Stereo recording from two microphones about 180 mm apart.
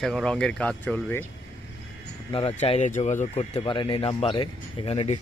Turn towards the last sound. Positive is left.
turn(degrees=35)  # may be behind; listen again after turning